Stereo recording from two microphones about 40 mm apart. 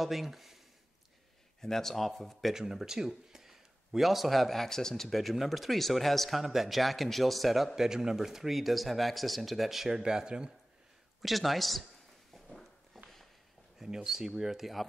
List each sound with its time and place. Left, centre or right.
0.0 s speech: centre
1.6 s speech: centre
2.5 s speech: centre
5.1 s speech: centre
6.4 s speech: centre
9.8 s speech: centre
11.1 s speech: centre
12.4 s walk: centre
13.7 s speech: centre